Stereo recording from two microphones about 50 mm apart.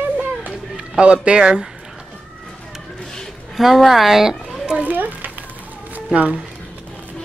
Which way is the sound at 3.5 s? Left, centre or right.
Centre.